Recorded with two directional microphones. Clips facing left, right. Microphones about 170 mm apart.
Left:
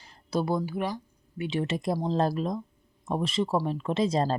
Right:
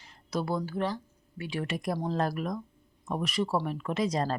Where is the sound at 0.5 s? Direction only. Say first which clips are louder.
Left 2 dB; 15° left (ahead or behind).